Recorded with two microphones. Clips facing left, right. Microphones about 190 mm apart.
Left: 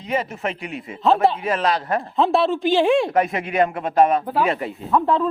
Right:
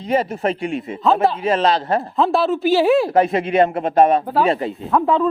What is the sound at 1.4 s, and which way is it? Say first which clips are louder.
Speech: right 4 dB; 30° right (ahead or behind).